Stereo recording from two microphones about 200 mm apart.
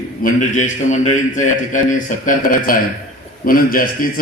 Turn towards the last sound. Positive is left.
turn(degrees=45)  # may be behind; listen again after turning